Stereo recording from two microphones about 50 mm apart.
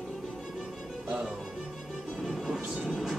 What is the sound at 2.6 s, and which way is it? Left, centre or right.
Vehicle, centre.